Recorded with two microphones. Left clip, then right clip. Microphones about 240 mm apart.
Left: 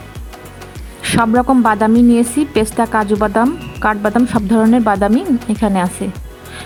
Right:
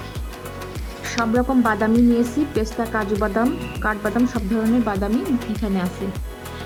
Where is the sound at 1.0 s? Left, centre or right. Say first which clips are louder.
Left 8 dB; left.